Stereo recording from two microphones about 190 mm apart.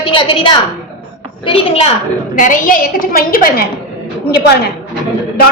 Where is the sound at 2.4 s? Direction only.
45° left (ahead or behind).